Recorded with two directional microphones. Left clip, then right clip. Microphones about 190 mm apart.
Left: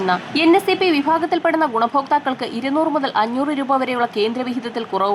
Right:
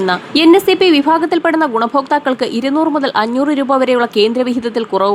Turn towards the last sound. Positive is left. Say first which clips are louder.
# right 7 dB
turn(degrees=-20)  # may be behind; listen again after turning